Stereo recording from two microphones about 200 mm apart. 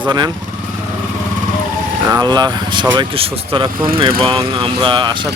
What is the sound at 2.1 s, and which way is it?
Speech, 20° right (ahead or behind).